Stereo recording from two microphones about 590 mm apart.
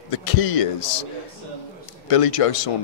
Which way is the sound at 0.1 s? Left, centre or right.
Left.